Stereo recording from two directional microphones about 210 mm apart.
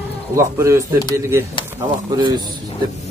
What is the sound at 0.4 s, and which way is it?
Speech, 15° right (ahead or behind).